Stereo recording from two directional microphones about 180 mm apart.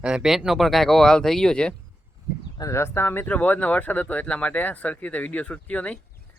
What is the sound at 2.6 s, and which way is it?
Speech, 15° left (ahead or behind).